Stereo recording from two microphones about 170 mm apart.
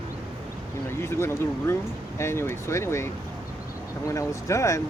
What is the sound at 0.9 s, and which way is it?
Speech, 15° left (ahead or behind).